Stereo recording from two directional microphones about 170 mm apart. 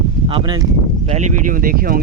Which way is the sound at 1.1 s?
45° right (ahead or behind).